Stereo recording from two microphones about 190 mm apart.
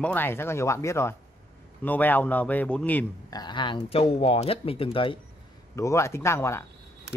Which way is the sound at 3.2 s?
20° left (ahead or behind).